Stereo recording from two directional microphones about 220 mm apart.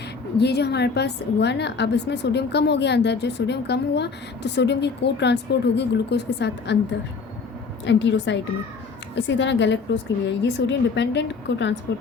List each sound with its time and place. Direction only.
0.3 s a woman's voice: 50° left (ahead or behind)
7.9 s a woman's voice: 55° left (ahead or behind)